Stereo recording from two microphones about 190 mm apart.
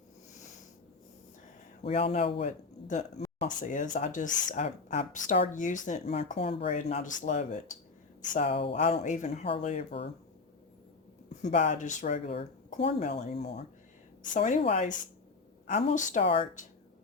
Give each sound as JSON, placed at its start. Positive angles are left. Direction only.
{"t": 1.8, "sound": "speech", "side_deg": 30}
{"t": 11.4, "sound": "speech", "side_deg": 35}